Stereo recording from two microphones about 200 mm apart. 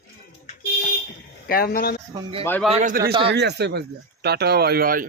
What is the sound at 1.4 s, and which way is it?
Speech, 50° left (ahead or behind).